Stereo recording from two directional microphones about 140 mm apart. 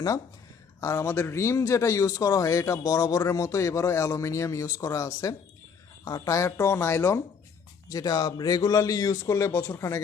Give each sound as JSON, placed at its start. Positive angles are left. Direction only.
{"t": 0.8, "sound": "a man's voice", "side_deg": 20}